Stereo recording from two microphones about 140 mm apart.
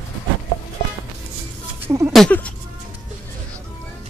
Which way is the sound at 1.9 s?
20° right (ahead or behind).